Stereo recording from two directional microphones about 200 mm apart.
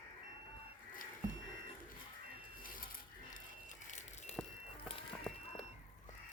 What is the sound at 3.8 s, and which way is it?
Vehicle, 35° left (ahead or behind).